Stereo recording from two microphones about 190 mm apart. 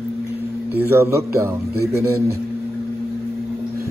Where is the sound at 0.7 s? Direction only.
15° right (ahead or behind).